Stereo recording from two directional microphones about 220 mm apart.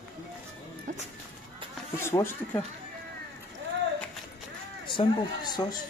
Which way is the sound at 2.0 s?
10° left (ahead or behind).